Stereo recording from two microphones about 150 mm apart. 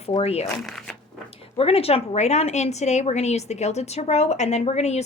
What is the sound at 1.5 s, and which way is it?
A woman's voice, 40° left (ahead or behind).